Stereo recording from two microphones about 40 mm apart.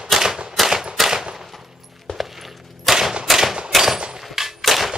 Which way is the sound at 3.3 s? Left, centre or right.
Centre.